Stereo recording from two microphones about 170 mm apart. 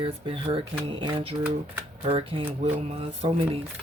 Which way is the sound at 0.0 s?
35° right (ahead or behind).